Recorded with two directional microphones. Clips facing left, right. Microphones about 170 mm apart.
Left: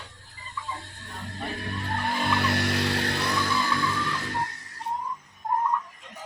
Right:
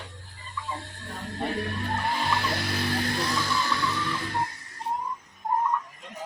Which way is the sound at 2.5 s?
75° left (ahead or behind).